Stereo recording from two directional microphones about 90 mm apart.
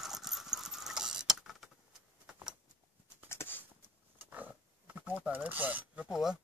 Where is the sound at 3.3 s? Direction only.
25° left (ahead or behind).